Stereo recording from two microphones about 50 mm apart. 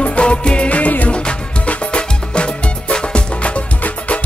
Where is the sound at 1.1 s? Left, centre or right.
Left.